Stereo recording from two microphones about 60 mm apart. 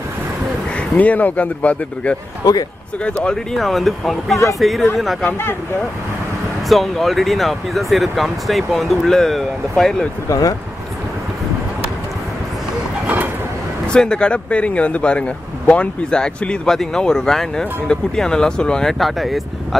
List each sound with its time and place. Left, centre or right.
0.9 s speech: left
2.4 s a man's voice: left
3.0 s speech: centre
3.5 s speech: centre
6.7 s speech: centre
13.0 s train: right
13.9 s speech: centre
18.9 s speech: centre